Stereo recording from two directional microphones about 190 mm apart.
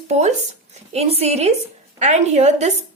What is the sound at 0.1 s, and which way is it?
A woman's voice, 35° right (ahead or behind).